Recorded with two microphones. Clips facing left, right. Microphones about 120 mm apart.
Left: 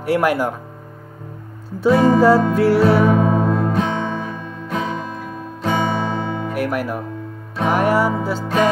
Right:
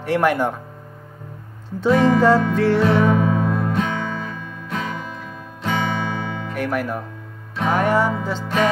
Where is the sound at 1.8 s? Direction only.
10° left (ahead or behind).